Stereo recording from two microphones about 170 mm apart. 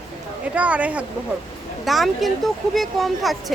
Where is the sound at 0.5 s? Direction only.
10° right (ahead or behind).